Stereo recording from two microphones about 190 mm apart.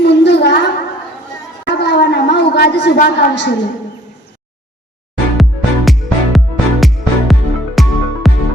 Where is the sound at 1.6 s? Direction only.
60° left (ahead or behind).